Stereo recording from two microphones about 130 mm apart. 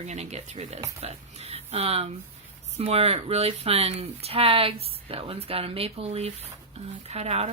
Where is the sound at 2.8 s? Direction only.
50° right (ahead or behind).